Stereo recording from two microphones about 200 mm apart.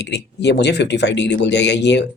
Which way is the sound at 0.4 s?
60° left (ahead or behind).